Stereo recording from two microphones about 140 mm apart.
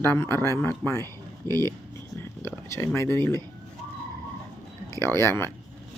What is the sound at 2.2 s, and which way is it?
Speech, 20° left (ahead or behind).